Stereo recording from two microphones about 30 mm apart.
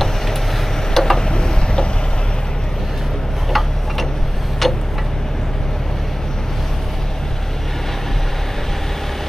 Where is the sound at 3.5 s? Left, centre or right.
Centre.